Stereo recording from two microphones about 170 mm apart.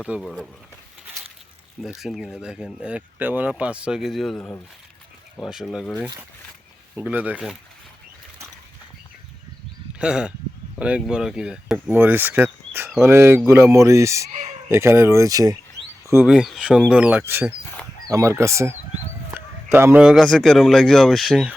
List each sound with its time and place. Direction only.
0.2 s speech: 5° left (ahead or behind)
2.0 s speech: centre (ahead or behind)
6.9 s speech: 10° right (ahead or behind)
10.0 s speech: 5° right (ahead or behind)
16.2 s speech: 5° right (ahead or behind)